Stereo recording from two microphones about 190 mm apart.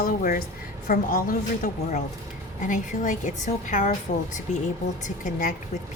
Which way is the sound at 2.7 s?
40° left (ahead or behind).